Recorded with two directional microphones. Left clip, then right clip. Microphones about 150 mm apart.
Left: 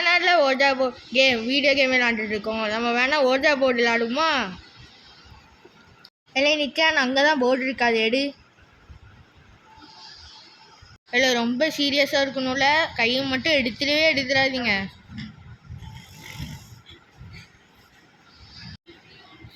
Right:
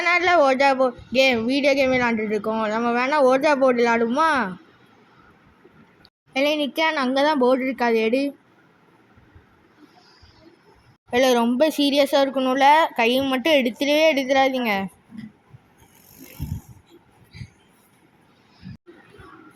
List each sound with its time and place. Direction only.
0.0 s speech: 10° right (ahead or behind)
6.3 s speech: 5° right (ahead or behind)
11.1 s a woman's voice: 30° right (ahead or behind)